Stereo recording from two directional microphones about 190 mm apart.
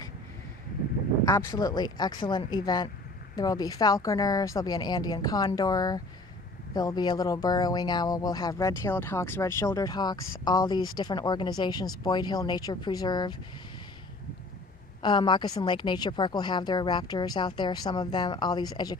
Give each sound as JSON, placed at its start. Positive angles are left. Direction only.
{"t": 1.2, "sound": "speech", "side_deg": 15}
{"t": 15.0, "sound": "speech", "side_deg": 25}